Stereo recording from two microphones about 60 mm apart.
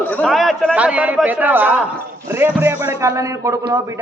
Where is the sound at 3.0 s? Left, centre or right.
Right.